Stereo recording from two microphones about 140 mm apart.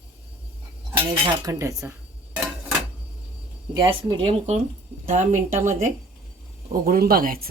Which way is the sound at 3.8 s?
35° right (ahead or behind).